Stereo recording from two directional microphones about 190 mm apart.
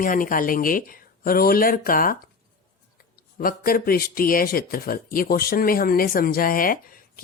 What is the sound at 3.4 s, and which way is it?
Speech, 50° left (ahead or behind).